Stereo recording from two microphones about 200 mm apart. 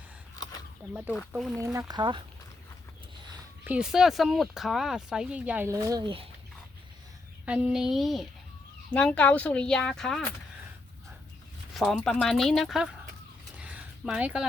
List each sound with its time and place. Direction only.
0.9 s speech: 5° right (ahead or behind)
1.6 s speech: 15° right (ahead or behind)
3.6 s speech: 5° right (ahead or behind); by 6.2 s 25° right (ahead or behind)
7.4 s speech: 5° right (ahead or behind)
11.7 s speech: centre (ahead or behind)
13.6 s a sound: 5° right (ahead or behind)